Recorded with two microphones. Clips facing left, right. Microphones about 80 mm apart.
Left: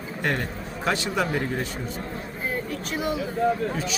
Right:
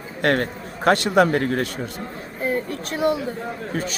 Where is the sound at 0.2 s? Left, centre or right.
Right.